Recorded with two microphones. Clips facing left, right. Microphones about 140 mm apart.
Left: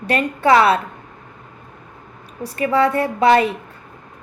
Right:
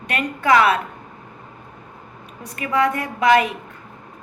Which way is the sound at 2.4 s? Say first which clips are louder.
Left 3 dB; 30° left (ahead or behind).